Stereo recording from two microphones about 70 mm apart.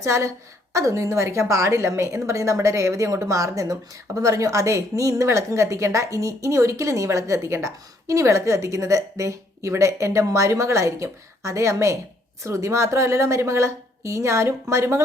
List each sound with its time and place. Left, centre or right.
0.0 s a woman's voice: right